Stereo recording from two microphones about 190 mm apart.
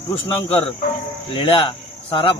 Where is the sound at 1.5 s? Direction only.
25° left (ahead or behind).